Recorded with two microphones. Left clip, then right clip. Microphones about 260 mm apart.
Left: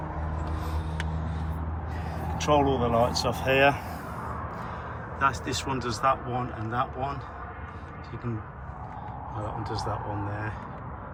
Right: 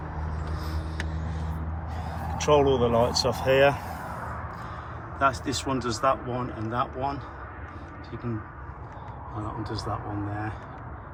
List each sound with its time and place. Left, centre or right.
2.5 s speech: right
2.8 s a man's voice: centre
5.2 s a man's voice: centre
9.6 s a man's voice: centre